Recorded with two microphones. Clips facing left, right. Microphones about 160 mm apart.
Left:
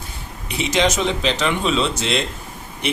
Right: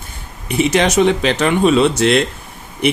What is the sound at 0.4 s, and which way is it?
Speech, 55° right (ahead or behind).